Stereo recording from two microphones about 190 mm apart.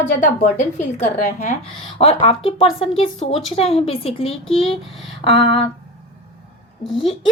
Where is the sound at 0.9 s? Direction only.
35° left (ahead or behind).